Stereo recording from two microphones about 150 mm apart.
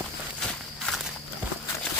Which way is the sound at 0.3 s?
Centre (ahead or behind).